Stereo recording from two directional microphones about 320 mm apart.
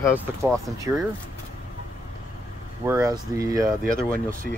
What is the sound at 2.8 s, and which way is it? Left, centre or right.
Speech, centre.